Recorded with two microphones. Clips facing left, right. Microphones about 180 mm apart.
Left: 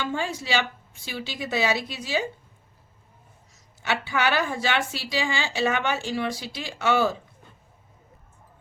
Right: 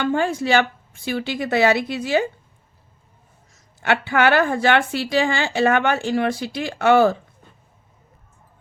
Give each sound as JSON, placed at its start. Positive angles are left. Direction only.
{"t": 0.0, "sound": "a woman's voice", "side_deg": -55}
{"t": 3.8, "sound": "a woman's voice", "side_deg": -60}